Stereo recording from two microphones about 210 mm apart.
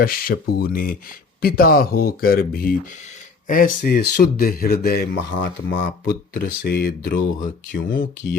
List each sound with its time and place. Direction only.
0.0 s speech: 45° left (ahead or behind)